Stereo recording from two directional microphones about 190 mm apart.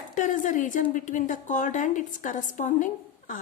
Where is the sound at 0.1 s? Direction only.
40° left (ahead or behind).